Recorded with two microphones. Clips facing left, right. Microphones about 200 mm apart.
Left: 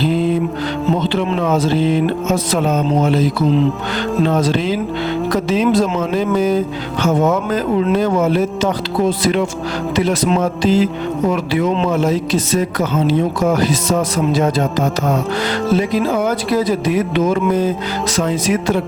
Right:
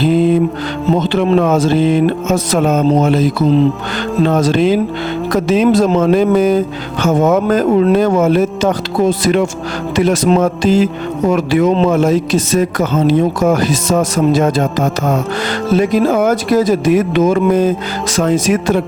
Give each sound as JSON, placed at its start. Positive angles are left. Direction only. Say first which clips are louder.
{"t": 0.9, "sound": "speech", "louder": "right 5 dB", "side_deg": -45}
{"t": 4.3, "sound": "speech", "louder": "right 4 dB", "side_deg": -45}